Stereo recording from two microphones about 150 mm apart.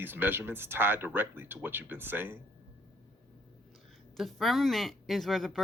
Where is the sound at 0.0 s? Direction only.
15° right (ahead or behind).